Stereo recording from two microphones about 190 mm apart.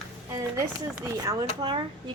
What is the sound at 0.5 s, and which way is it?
Speech, 15° right (ahead or behind).